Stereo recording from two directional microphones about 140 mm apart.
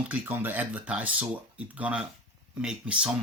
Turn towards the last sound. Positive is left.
turn(degrees=-5)  # may be behind; listen again after turning